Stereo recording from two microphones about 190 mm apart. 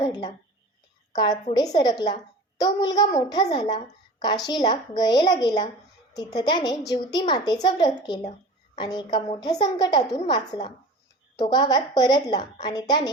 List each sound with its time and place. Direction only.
0.0 s a woman's voice: 20° left (ahead or behind)